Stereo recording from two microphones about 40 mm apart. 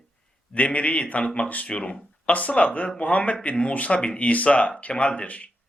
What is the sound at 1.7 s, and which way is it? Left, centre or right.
A man's voice, left.